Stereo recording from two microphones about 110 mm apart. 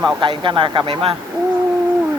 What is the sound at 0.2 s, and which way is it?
Speech, 50° right (ahead or behind).